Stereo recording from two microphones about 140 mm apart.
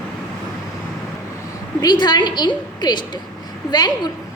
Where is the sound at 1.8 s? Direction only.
30° left (ahead or behind).